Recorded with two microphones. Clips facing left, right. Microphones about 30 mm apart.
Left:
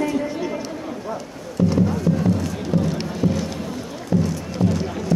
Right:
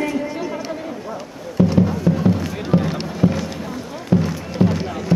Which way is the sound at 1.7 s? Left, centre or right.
Centre.